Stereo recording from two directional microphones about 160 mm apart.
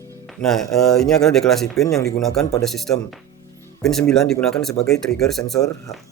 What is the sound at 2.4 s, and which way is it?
Speech, 20° left (ahead or behind).